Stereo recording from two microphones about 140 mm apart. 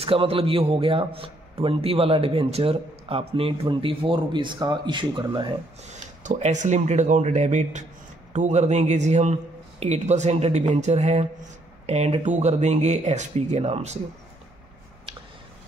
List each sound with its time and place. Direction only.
0.0 s a man's voice: 40° right (ahead or behind)
6.2 s a man's voice: 60° right (ahead or behind)